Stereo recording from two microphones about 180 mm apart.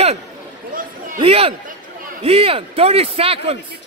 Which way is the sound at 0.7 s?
50° right (ahead or behind).